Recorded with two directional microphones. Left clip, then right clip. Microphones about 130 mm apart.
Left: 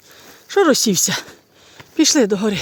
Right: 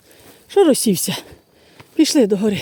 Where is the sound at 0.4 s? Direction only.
40° right (ahead or behind).